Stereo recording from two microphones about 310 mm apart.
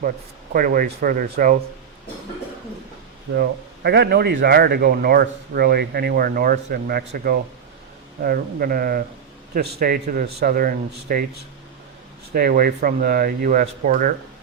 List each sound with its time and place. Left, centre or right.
0.5 s speech: right
3.3 s a man's voice: right
12.3 s speech: right